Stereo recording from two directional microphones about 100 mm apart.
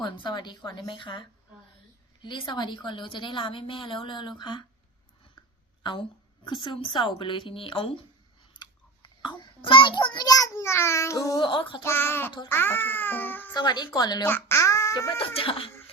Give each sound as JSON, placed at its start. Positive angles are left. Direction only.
{"t": 0.0, "sound": "a woman's voice", "side_deg": 50}
{"t": 2.2, "sound": "a woman's voice", "side_deg": 55}
{"t": 5.8, "sound": "a woman's voice", "side_deg": 50}
{"t": 8.5, "sound": "a sound", "side_deg": 50}
{"t": 11.4, "sound": "a woman's voice", "side_deg": 55}
{"t": 11.8, "sound": "speech", "side_deg": 25}
{"t": 13.5, "sound": "a woman's voice", "side_deg": 45}
{"t": 14.3, "sound": "a child's voice", "side_deg": 25}
{"t": 15.2, "sound": "a woman's voice", "side_deg": 65}